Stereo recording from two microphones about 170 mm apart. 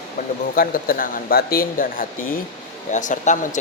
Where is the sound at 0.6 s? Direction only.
55° left (ahead or behind).